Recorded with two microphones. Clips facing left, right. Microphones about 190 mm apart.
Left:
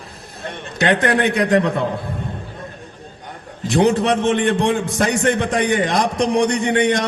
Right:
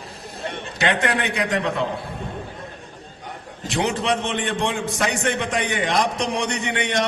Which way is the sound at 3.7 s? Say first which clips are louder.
Left 7 dB; 55° left (ahead or behind).